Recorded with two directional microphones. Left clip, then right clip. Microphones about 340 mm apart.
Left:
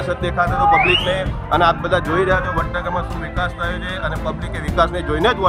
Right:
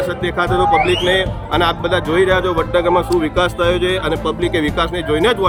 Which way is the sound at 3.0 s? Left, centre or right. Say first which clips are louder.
Right 8 dB; centre.